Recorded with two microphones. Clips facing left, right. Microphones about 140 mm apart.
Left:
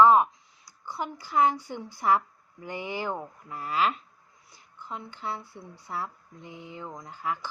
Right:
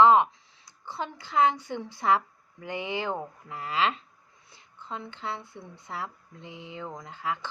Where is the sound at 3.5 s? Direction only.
80° right.